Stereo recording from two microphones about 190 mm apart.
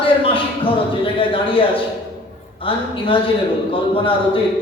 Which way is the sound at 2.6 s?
30° left (ahead or behind).